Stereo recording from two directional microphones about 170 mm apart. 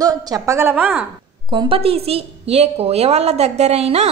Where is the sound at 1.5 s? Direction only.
30° right (ahead or behind).